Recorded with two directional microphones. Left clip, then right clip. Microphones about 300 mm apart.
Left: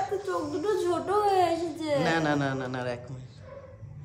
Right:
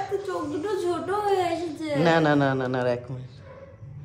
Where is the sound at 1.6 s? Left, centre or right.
Centre.